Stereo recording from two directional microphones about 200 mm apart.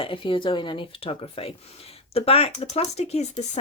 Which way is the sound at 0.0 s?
25° left (ahead or behind).